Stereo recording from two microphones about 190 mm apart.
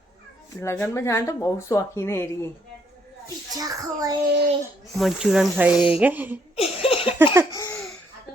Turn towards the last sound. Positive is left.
turn(degrees=15)  # may be behind; listen again after turning